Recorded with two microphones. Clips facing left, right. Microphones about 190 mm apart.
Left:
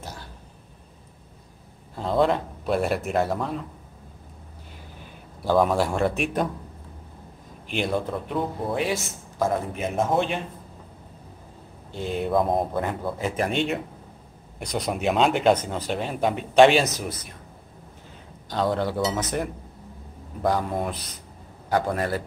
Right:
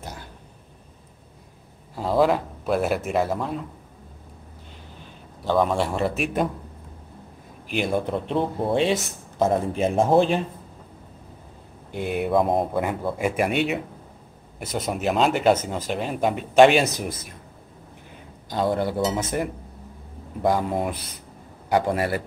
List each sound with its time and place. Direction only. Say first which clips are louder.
2.0 s speech: right 2 dB; 5° right (ahead or behind)
5.4 s speech: left 1 dB; 5° left (ahead or behind)
7.7 s speech: right 2 dB; 5° right (ahead or behind)
8.1 s speech: right 3 dB; 25° right (ahead or behind)
11.9 s speech: right 2 dB; 10° right (ahead or behind)
12.3 s speech: right 1 dB; centre (ahead or behind)
18.5 s speech: right 1 dB; 10° right (ahead or behind)
20.4 s speech: right 2 dB; 10° right (ahead or behind)